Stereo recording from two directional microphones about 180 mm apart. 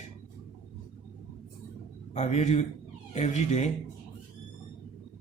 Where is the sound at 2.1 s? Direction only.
35° left (ahead or behind).